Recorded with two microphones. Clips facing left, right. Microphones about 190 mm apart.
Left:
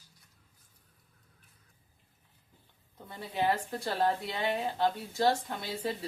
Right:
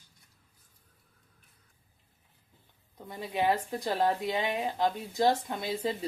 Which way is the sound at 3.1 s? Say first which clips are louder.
Right 2 dB; 15° right (ahead or behind).